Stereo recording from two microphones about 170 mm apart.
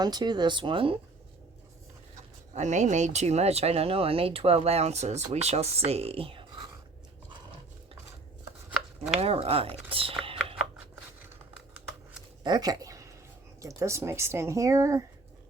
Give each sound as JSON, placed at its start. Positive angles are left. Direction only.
{"t": 0.0, "sound": "speech", "side_deg": -25}
{"t": 2.6, "sound": "speech", "side_deg": -45}
{"t": 9.2, "sound": "speech", "side_deg": -35}
{"t": 10.2, "sound": "a sound", "side_deg": -35}
{"t": 12.4, "sound": "speech", "side_deg": -25}